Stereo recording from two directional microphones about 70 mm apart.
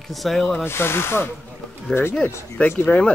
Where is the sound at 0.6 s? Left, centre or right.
Left.